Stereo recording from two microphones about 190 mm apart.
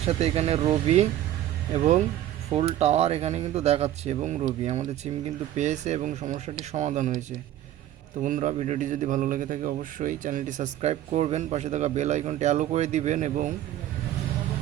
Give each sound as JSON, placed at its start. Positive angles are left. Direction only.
{"t": 0.0, "sound": "a man's voice", "side_deg": -35}
{"t": 2.5, "sound": "a man's voice", "side_deg": -30}